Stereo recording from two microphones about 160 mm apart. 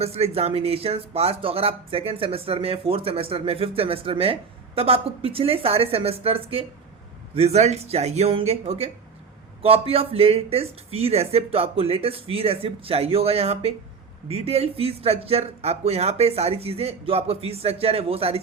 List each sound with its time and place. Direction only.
0.0 s speech: 40° right (ahead or behind)